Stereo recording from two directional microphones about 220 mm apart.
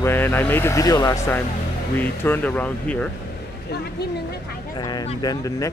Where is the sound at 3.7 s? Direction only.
45° left (ahead or behind).